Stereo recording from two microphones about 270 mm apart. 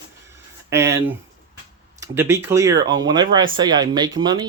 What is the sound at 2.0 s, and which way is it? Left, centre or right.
Speech, centre.